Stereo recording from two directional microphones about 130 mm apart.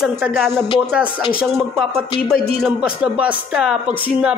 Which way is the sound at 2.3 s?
5° right (ahead or behind).